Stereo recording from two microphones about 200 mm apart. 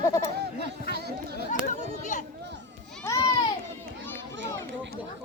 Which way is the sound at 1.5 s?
40° left (ahead or behind).